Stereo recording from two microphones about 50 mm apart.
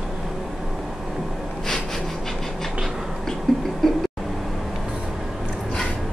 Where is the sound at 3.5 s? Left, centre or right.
Centre.